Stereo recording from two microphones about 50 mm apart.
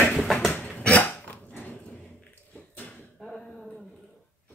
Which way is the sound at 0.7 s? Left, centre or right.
Left.